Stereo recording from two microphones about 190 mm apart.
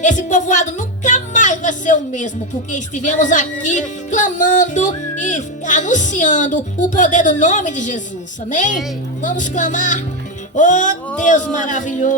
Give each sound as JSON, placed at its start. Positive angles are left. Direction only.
{"t": 0.0, "sound": "music", "side_deg": 40}